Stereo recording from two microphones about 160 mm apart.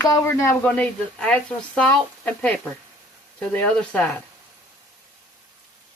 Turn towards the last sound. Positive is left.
turn(degrees=10)  # may be behind; listen again after turning